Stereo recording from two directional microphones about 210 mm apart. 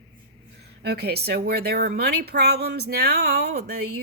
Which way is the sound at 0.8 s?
50° right (ahead or behind).